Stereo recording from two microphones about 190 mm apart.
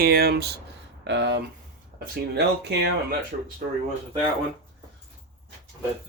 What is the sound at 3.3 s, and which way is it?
Speech, 45° right (ahead or behind).